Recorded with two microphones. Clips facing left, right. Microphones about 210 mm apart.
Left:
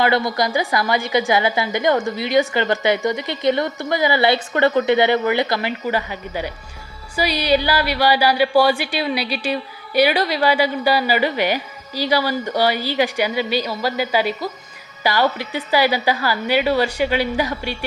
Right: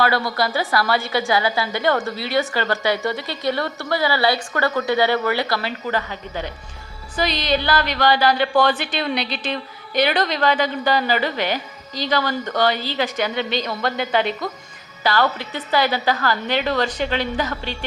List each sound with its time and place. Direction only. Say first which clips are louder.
0.0 s speech: left 2 dB; 20° left (ahead or behind)